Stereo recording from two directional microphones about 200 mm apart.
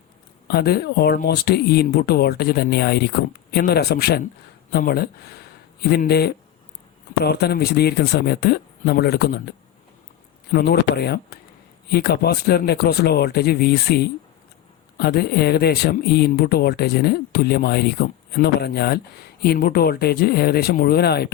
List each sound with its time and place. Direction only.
0.4 s speech: 55° left (ahead or behind)